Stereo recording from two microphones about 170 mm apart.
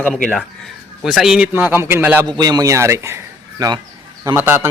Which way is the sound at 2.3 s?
25° right (ahead or behind).